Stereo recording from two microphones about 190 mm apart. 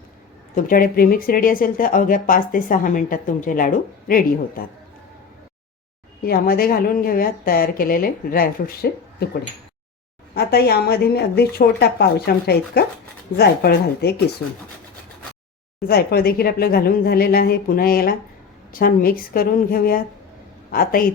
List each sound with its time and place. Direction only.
0.5 s speech: 50° left (ahead or behind)
6.2 s speech: 50° left (ahead or behind)
10.3 s speech: 55° left (ahead or behind)
15.9 s a woman's voice: 55° left (ahead or behind)